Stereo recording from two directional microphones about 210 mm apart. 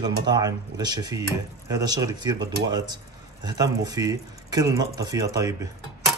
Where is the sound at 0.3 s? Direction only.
15° right (ahead or behind).